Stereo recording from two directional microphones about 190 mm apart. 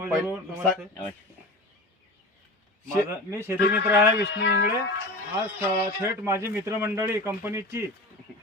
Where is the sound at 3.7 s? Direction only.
65° left (ahead or behind).